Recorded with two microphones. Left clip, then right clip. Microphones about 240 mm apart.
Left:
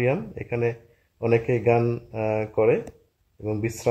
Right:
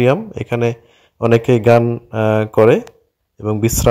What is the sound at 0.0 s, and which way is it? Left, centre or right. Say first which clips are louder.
A man's voice: right 10 dB; right.